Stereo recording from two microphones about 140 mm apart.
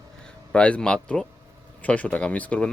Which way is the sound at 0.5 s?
10° left (ahead or behind).